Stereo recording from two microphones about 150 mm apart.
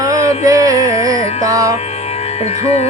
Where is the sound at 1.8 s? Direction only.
45° left (ahead or behind).